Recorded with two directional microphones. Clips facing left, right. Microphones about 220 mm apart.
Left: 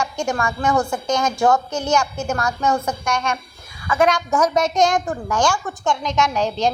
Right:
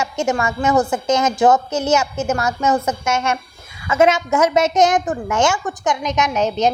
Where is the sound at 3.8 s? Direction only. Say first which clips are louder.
Right 3 dB; 25° right (ahead or behind).